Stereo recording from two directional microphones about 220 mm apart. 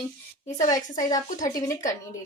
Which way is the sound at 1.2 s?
35° left (ahead or behind).